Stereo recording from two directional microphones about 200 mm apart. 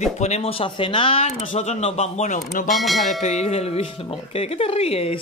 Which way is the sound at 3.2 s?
35° left (ahead or behind).